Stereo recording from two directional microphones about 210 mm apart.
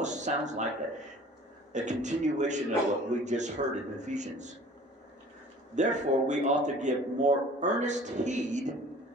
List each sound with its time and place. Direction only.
0.0 s a man's voice: 35° right (ahead or behind)
5.8 s a man's voice: 35° right (ahead or behind)